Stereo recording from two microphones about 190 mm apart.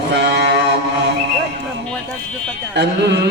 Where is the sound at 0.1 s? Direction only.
65° right (ahead or behind).